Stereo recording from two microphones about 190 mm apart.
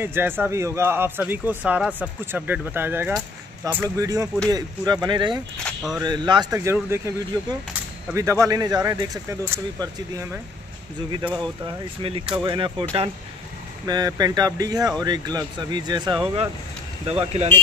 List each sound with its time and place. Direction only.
0.0 s speech: 10° right (ahead or behind)
5.6 s a sound: centre (ahead or behind)
6.0 s speech: 25° right (ahead or behind)
11.2 s speech: 5° right (ahead or behind)
11.6 s speech: 30° right (ahead or behind)
13.8 s speech: 20° right (ahead or behind)
17.0 s speech: 30° right (ahead or behind)